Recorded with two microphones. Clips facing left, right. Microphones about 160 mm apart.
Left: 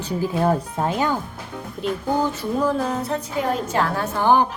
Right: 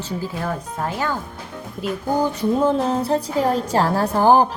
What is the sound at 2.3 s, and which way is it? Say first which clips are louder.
A woman's voice: right 3 dB; 25° right (ahead or behind).